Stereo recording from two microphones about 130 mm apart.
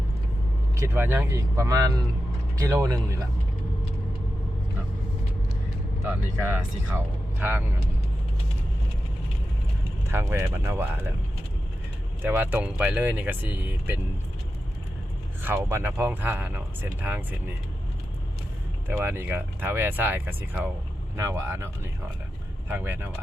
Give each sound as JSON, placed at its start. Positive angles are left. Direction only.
{"t": 0.8, "sound": "speech", "side_deg": -15}
{"t": 6.0, "sound": "speech", "side_deg": -20}
{"t": 10.1, "sound": "speech", "side_deg": -20}
{"t": 12.2, "sound": "speech", "side_deg": -15}
{"t": 15.4, "sound": "speech", "side_deg": -15}
{"t": 18.9, "sound": "speech", "side_deg": -15}
{"t": 22.7, "sound": "speech", "side_deg": -15}